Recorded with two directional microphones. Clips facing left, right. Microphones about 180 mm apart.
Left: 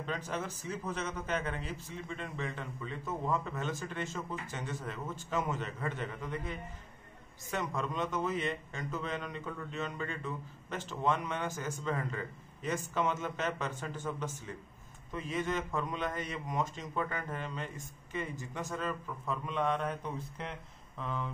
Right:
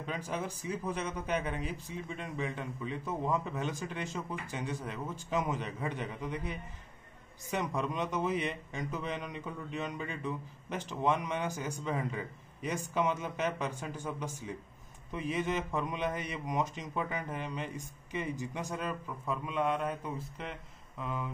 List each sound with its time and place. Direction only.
0.0 s a man's voice: 10° right (ahead or behind)